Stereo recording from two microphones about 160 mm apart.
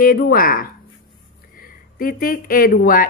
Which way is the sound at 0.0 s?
65° left (ahead or behind).